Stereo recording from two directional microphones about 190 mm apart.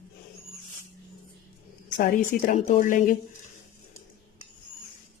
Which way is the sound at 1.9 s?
50° left (ahead or behind).